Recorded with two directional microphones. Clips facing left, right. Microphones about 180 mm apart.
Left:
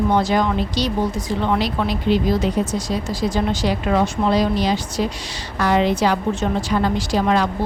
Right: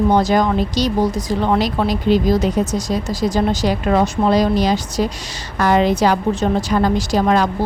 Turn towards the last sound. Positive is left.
turn(degrees=-45)  # may be behind; listen again after turning